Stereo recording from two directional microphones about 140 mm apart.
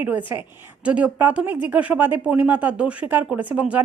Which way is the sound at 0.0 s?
10° right (ahead or behind).